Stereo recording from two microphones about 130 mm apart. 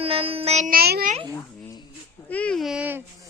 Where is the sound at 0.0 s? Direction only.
50° right (ahead or behind); by 1.2 s 80° right.